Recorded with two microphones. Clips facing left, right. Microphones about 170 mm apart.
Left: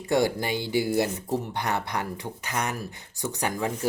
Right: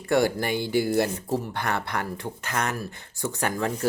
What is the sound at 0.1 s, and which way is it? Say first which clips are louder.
Speech: right 1 dB; 20° left (ahead or behind).